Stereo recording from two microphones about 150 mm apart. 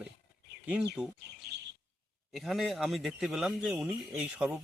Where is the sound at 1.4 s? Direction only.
90° right.